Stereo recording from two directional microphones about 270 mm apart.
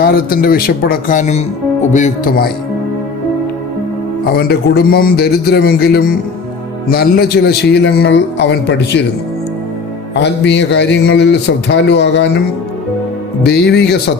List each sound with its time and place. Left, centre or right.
0.0 s a man's voice: left
4.4 s a man's voice: left
10.2 s a man's voice: left
13.4 s a man's voice: left